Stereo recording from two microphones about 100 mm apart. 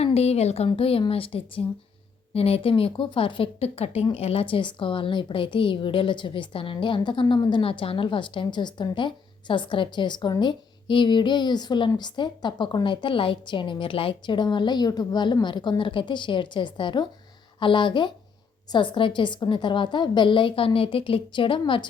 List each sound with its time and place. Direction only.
0.0 s speech: 90° left
0.8 s a woman's voice: 70° left (ahead or behind)
2.3 s a woman's voice: 80° left
4.1 s a woman's voice: 80° left; by 7.6 s 45° left (ahead or behind)
7.6 s a woman's voice: 65° left (ahead or behind)